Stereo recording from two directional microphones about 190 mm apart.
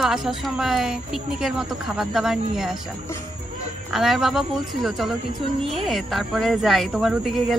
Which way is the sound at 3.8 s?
Centre (ahead or behind).